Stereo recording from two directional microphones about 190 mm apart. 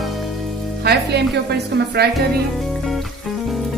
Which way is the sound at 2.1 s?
Centre (ahead or behind).